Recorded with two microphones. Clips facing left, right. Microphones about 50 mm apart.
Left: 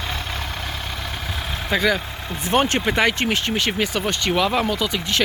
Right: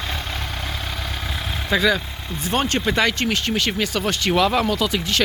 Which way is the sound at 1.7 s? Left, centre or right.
Centre.